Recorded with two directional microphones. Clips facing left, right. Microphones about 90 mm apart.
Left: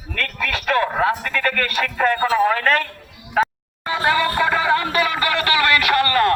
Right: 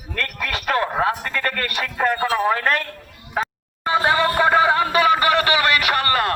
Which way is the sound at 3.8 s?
20° right (ahead or behind).